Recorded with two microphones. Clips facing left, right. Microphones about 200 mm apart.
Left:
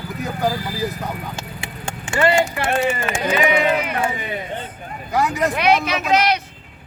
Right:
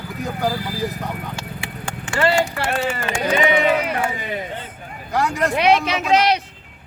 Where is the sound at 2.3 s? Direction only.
20° left (ahead or behind).